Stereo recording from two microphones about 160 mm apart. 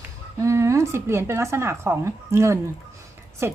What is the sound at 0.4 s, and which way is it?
Speech, 20° right (ahead or behind).